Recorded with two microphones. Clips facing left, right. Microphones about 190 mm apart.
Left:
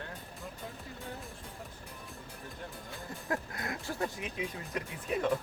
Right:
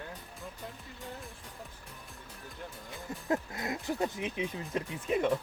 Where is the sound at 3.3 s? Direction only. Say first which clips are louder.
Right 4 dB; 20° right (ahead or behind).